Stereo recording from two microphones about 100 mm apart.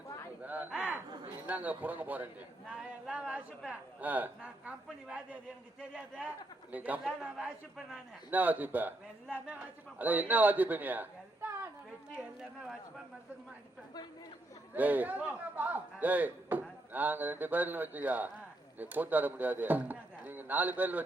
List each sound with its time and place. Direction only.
0.4 s a sound: 15° right (ahead or behind)
1.5 s a man's voice: 15° right (ahead or behind)
10.0 s a man's voice: 15° right (ahead or behind)
14.7 s a man's voice: 15° right (ahead or behind)